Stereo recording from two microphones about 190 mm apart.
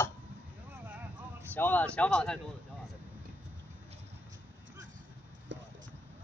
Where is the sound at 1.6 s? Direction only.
10° left (ahead or behind).